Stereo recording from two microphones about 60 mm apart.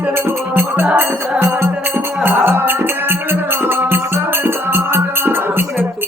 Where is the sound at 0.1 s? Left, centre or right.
Right.